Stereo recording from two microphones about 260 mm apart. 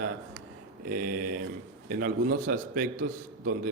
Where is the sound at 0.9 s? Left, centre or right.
Right.